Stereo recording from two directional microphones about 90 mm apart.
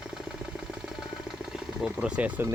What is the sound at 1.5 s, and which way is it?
Speech, 10° right (ahead or behind).